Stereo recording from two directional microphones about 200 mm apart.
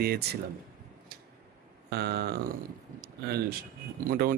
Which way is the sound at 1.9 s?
55° right (ahead or behind).